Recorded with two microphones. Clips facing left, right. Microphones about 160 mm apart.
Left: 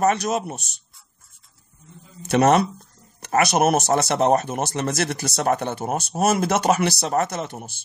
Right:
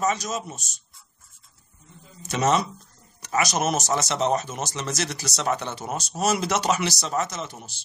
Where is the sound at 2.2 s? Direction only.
60° left (ahead or behind).